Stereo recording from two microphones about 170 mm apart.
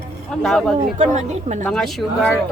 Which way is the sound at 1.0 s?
45° right (ahead or behind).